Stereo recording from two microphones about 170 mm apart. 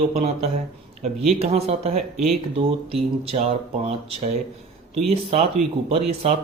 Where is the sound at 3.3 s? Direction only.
35° right (ahead or behind).